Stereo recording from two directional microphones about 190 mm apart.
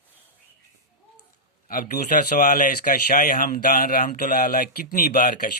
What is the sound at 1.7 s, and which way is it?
A man's voice, 45° left (ahead or behind).